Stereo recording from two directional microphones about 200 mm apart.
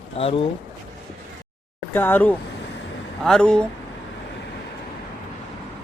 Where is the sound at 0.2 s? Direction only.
25° left (ahead or behind).